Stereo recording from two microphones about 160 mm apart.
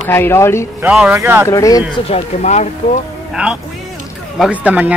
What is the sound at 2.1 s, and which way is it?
Speech, 45° left (ahead or behind).